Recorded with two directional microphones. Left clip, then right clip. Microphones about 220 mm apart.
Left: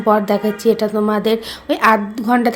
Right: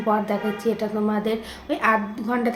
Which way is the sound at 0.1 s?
45° left (ahead or behind).